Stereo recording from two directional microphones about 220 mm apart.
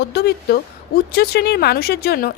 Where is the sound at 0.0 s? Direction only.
45° left (ahead or behind).